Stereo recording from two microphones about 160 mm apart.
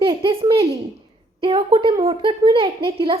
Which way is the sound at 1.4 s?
35° right (ahead or behind).